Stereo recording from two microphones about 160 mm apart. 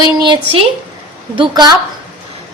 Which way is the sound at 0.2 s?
30° right (ahead or behind).